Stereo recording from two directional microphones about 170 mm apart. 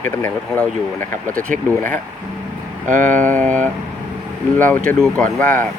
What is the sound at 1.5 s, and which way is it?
Speech, 50° right (ahead or behind).